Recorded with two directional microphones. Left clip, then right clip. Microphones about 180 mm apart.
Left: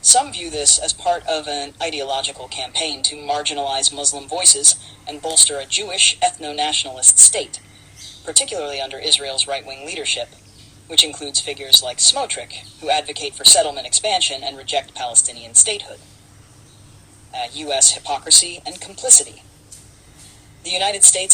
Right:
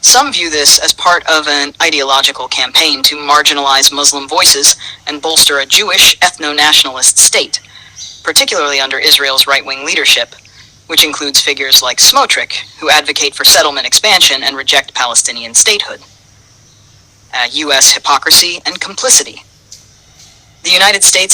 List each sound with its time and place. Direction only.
0.1 s speech: 50° right (ahead or behind)
11.4 s speech: 50° right (ahead or behind)
17.3 s speech: 50° right (ahead or behind)
20.7 s speech: 45° right (ahead or behind)